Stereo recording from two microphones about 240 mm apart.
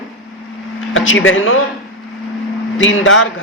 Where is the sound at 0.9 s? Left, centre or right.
Left.